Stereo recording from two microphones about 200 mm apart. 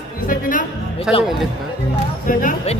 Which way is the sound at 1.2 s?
Centre (ahead or behind).